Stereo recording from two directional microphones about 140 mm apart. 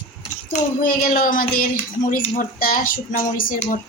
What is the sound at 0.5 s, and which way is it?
Child singing, 85° left.